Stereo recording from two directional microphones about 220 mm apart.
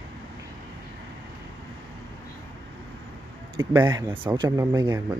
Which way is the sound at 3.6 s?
15° right (ahead or behind).